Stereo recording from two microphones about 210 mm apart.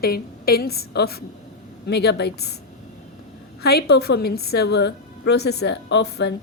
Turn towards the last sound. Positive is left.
turn(degrees=55)  # may be behind; listen again after turning